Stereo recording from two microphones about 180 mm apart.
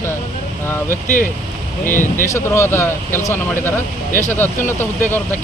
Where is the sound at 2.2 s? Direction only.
15° left (ahead or behind).